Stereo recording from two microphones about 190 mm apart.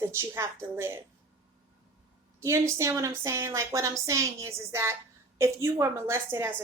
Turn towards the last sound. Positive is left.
turn(degrees=-15)  # may be behind; listen again after turning